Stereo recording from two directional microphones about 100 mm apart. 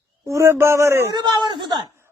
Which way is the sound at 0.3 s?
30° right (ahead or behind).